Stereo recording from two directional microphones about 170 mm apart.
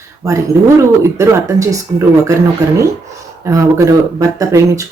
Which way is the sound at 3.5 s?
20° right (ahead or behind).